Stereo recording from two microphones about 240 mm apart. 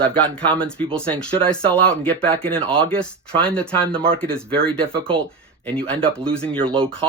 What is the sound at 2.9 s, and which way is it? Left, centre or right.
Speech, centre.